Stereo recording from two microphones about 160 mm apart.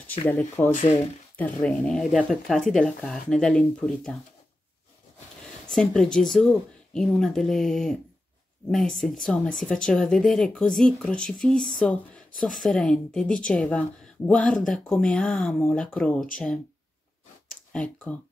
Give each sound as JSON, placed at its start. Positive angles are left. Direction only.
{"t": 0.3, "sound": "speech", "side_deg": 10}
{"t": 0.7, "sound": "speech", "side_deg": 50}
{"t": 1.3, "sound": "speech", "side_deg": 10}
{"t": 5.7, "sound": "speech", "side_deg": 5}
{"t": 17.7, "sound": "speech", "side_deg": 5}